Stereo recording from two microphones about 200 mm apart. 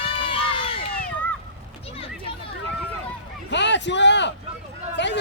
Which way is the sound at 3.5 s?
60° left (ahead or behind).